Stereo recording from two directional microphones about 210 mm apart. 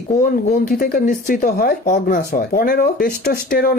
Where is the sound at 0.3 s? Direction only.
45° left (ahead or behind).